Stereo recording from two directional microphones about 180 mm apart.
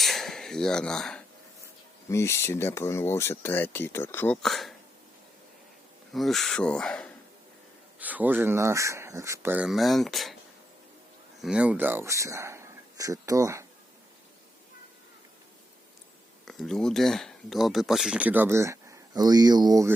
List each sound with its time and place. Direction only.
0.0 s a sound: centre (ahead or behind)
2.0 s speech: 15° left (ahead or behind)
4.4 s speech: centre (ahead or behind)
6.1 s speech: centre (ahead or behind)
7.9 s speech: 10° right (ahead or behind)
11.3 s speech: 5° right (ahead or behind)
16.5 s speech: centre (ahead or behind); by 19.9 s 20° right (ahead or behind)